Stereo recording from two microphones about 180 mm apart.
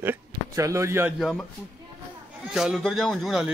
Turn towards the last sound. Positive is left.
turn(degrees=0)  # may be behind; listen again after turning